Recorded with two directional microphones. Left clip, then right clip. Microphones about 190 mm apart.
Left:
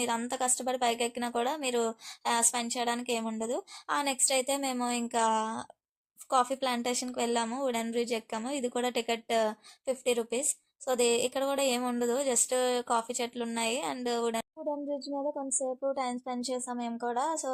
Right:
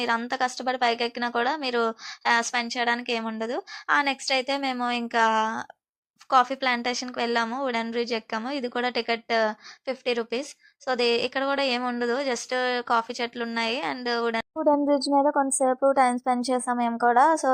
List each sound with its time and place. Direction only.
0.0 s a woman's voice: 10° right (ahead or behind)
14.6 s a woman's voice: 40° right (ahead or behind)